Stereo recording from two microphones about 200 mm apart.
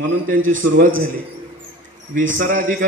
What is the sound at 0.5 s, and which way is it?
Speech, 40° right (ahead or behind).